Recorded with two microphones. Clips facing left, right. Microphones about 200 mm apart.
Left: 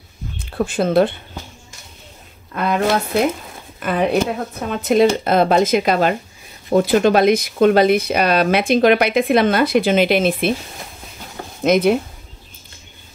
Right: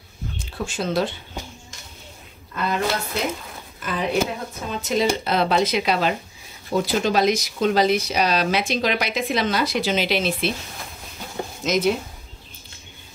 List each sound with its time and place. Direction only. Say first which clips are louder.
0.4 s speech: left 9 dB; 60° left (ahead or behind)
2.5 s speech: left 6 dB; 60° left (ahead or behind)
11.6 s speech: left 7 dB; 55° left (ahead or behind)